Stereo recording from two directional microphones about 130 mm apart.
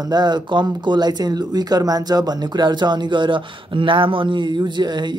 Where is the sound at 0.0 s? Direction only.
35° right (ahead or behind).